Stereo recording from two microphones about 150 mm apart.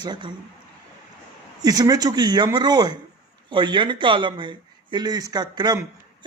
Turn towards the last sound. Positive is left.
turn(degrees=-25)  # may be behind; listen again after turning